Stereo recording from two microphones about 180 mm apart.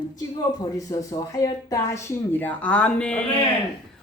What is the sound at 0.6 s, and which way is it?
Speech, 20° left (ahead or behind).